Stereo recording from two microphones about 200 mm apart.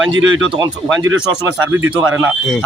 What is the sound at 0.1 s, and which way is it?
Speech, 75° right (ahead or behind).